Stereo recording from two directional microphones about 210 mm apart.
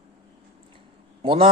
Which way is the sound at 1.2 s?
30° right (ahead or behind).